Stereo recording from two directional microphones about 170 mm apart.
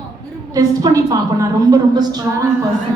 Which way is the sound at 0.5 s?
20° right (ahead or behind).